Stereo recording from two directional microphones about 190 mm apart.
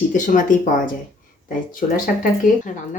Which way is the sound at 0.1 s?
40° left (ahead or behind).